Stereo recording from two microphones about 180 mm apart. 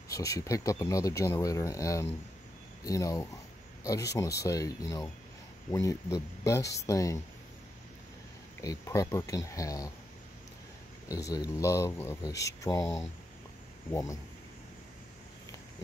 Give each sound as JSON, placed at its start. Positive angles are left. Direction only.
{"t": 0.1, "sound": "speech", "side_deg": 20}
{"t": 8.5, "sound": "speech", "side_deg": 15}
{"t": 11.1, "sound": "speech", "side_deg": 20}